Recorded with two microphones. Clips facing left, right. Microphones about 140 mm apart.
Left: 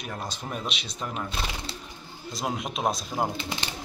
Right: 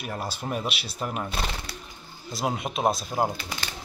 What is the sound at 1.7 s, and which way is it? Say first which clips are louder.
Bird: left 1 dB; 25° left (ahead or behind).